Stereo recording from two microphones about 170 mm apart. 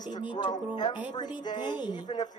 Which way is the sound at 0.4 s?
25° left (ahead or behind).